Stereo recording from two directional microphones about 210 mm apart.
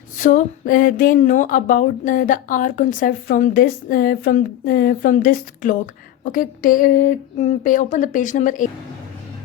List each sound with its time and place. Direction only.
0.2 s a woman's voice: 40° left (ahead or behind)